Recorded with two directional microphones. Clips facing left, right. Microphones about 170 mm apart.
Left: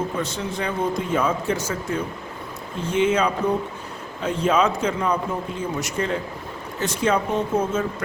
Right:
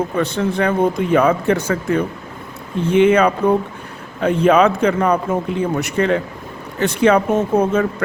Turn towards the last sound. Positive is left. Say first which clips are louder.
# right 6 dB
turn(degrees=-65)  # may be behind; listen again after turning